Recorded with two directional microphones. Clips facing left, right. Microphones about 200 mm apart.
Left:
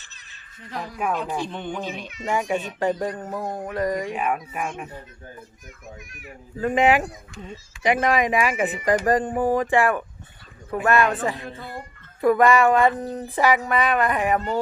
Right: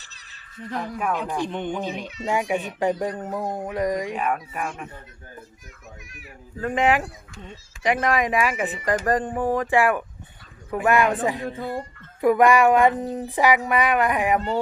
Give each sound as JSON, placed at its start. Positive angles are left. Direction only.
{"t": 1.4, "sound": "speech", "side_deg": -15}
{"t": 4.1, "sound": "speech", "side_deg": 5}
{"t": 6.6, "sound": "speech", "side_deg": 5}